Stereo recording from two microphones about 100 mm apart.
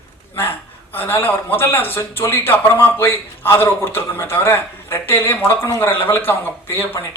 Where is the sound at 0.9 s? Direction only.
20° left (ahead or behind).